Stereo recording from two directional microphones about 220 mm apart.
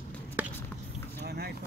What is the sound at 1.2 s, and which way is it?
Vehicle, 45° right (ahead or behind).